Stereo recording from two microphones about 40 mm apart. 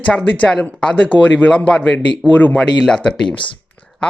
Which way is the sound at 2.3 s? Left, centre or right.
Left.